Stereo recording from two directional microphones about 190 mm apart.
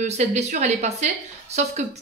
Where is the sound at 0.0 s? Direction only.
35° right (ahead or behind).